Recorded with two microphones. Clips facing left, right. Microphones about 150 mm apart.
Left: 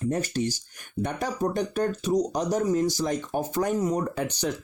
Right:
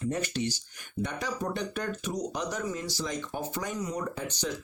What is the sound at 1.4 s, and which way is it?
Speech, 40° left (ahead or behind).